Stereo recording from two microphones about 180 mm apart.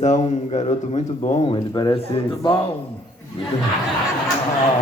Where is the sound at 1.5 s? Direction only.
25° left (ahead or behind).